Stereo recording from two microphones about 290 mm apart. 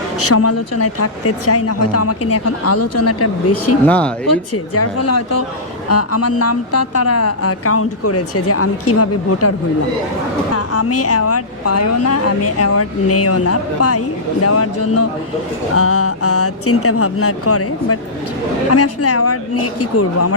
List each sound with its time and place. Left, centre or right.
0.2 s a woman's voice: left
3.8 s speech: centre
4.5 s a woman's voice: left
10.5 s a woman's voice: left